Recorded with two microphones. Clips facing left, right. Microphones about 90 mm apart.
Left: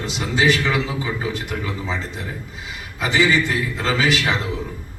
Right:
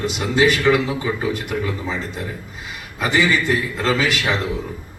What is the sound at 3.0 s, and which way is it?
A man's voice, 50° right (ahead or behind).